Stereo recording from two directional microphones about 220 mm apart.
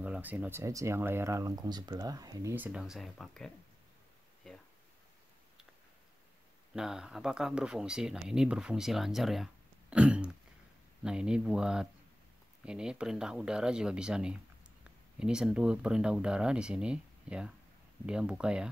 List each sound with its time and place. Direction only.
0.0 s speech: 5° right (ahead or behind)
4.4 s a sound: centre (ahead or behind)
6.7 s speech: centre (ahead or behind)